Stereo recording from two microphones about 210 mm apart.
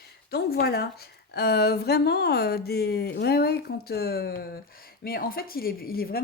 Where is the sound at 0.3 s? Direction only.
50° left (ahead or behind).